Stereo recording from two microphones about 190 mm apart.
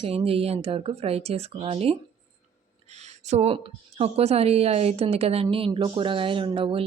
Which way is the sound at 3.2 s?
35° right (ahead or behind).